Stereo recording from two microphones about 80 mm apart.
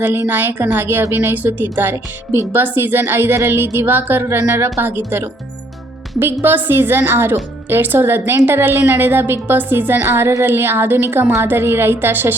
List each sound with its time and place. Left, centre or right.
0.0 s a woman's voice: right
6.4 s a woman's voice: right